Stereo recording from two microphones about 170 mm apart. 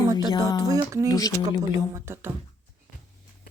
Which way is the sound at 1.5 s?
20° right (ahead or behind).